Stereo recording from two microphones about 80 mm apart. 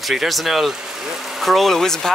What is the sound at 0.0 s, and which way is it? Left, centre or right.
Speech, centre.